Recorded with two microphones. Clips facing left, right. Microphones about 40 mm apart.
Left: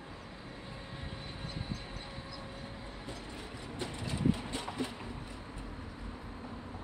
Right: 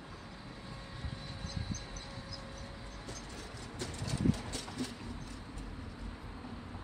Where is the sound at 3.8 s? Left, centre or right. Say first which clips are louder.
Left 1 dB; left.